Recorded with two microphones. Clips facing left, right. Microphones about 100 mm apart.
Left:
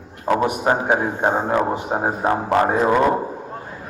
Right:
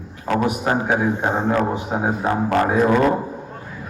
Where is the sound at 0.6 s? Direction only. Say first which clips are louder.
Left 1 dB; 25° left (ahead or behind).